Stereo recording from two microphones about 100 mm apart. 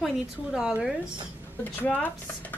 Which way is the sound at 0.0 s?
5° right (ahead or behind).